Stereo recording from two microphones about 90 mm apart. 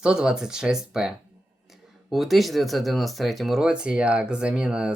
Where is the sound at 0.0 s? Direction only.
10° right (ahead or behind).